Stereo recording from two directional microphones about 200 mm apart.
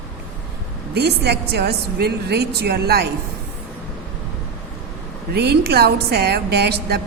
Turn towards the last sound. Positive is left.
turn(degrees=-50)  # may be behind; listen again after turning